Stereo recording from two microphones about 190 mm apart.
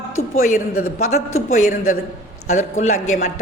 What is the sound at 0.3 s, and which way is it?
Speech, 40° left (ahead or behind).